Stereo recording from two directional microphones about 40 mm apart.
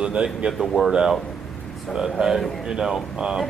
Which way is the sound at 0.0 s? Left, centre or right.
Right.